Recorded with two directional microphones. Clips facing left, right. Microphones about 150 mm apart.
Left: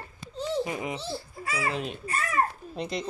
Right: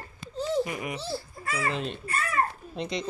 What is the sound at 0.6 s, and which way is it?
Speech, 25° left (ahead or behind).